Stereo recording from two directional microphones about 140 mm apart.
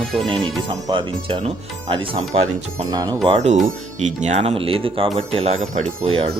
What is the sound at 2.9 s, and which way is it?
Speech, 30° right (ahead or behind).